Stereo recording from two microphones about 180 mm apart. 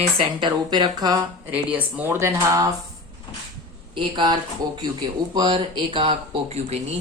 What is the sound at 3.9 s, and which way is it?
Speech, 25° right (ahead or behind).